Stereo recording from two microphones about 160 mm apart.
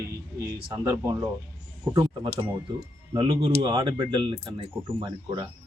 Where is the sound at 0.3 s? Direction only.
20° right (ahead or behind).